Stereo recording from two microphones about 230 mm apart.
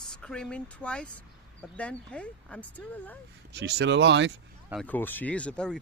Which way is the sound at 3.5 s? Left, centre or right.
Right.